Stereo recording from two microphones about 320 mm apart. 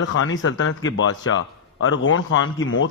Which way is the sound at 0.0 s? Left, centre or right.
Left.